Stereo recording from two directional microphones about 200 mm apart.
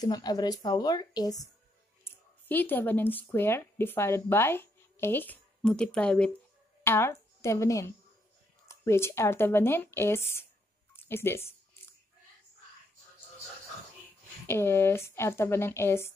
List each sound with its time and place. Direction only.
0.0 s speech: 20° left (ahead or behind)
14.5 s speech: 10° left (ahead or behind)